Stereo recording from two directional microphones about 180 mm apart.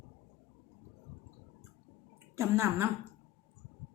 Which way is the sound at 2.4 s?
15° right (ahead or behind).